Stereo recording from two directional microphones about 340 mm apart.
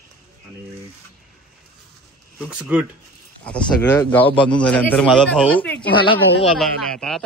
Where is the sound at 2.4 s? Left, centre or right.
Centre.